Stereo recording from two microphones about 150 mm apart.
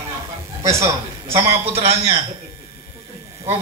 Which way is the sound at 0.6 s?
20° right (ahead or behind).